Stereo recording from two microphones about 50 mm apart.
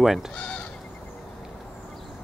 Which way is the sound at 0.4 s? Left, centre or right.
Left.